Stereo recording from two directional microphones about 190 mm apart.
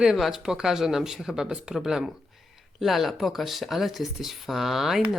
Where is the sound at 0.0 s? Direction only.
Centre (ahead or behind).